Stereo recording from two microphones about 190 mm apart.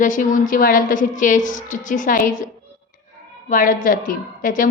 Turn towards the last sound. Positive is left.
turn(degrees=45)  # may be behind; listen again after turning